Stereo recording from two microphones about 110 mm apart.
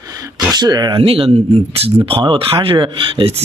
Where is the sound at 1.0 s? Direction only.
60° right (ahead or behind).